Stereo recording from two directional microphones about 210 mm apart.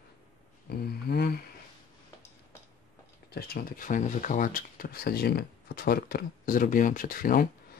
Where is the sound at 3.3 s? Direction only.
50° left (ahead or behind).